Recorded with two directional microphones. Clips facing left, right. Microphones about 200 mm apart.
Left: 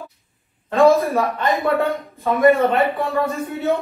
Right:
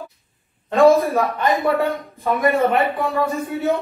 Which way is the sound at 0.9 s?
Centre (ahead or behind).